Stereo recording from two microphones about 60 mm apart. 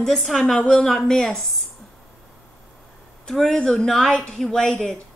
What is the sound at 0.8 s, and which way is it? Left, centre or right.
Speech, centre.